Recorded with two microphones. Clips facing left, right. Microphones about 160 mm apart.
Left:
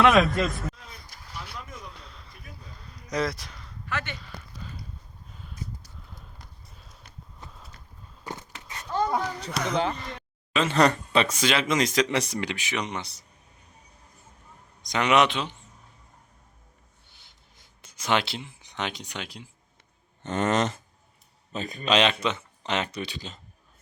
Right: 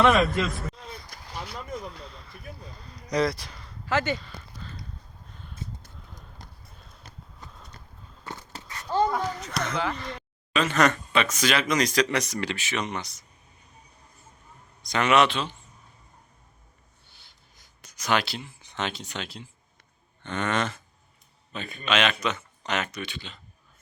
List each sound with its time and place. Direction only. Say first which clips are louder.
0.0 s speech: left 1 dB; centre (ahead or behind)
1.9 s a sound: right 4 dB; centre (ahead or behind)
3.8 s speech: right 8 dB; 90° right
4.2 s a sound: left 1 dB; 10° left (ahead or behind)
7.3 s horse: left 2 dB; 5° left (ahead or behind)
8.2 s a sound: left 1 dB; 20° left (ahead or behind)
9.5 s a man's voice: left 6 dB; 5° left (ahead or behind)
10.5 s speech: left 1 dB; 25° left (ahead or behind)
12.4 s a man's voice: right 1 dB; 15° left (ahead or behind)
14.8 s a man's voice: even; 15° left (ahead or behind)
17.1 s a sound: even; 20° left (ahead or behind)
20.2 s speech: left 4 dB; 40° left (ahead or behind)
21.5 s speech: left 3 dB; 35° left (ahead or behind)